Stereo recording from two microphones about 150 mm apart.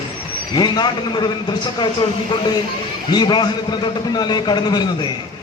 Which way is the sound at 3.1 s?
30° left (ahead or behind).